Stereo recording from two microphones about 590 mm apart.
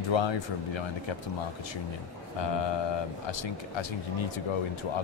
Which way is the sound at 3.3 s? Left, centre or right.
Left.